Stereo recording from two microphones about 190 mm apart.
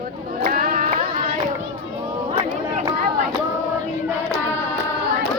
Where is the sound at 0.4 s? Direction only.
50° right (ahead or behind).